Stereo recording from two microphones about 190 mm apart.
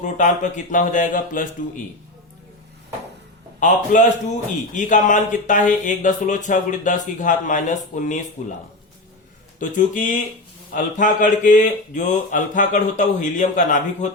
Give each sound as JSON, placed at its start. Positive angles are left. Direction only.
{"t": 0.0, "sound": "a man's voice", "side_deg": 40}
{"t": 3.6, "sound": "speech", "side_deg": 40}
{"t": 9.6, "sound": "a man's voice", "side_deg": 45}